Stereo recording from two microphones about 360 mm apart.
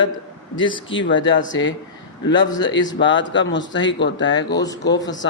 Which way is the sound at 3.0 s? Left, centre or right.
Left.